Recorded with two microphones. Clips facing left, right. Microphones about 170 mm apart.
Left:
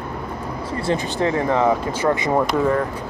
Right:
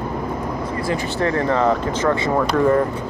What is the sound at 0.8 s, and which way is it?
Speech, 20° left (ahead or behind).